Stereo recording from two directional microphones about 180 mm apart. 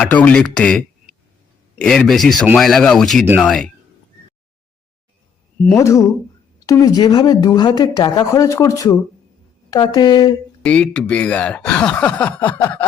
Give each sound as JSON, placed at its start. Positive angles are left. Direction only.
{"t": 0.0, "sound": "speech", "side_deg": 10}
{"t": 5.6, "sound": "a woman's voice", "side_deg": 15}
{"t": 10.6, "sound": "speech", "side_deg": 5}